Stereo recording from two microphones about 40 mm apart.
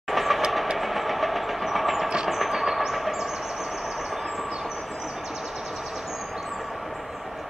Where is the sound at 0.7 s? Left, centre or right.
Centre.